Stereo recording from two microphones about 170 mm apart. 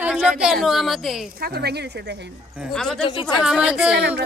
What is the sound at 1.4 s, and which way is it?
Speech, 70° right (ahead or behind).